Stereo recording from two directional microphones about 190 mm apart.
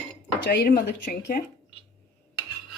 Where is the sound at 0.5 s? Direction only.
50° left (ahead or behind).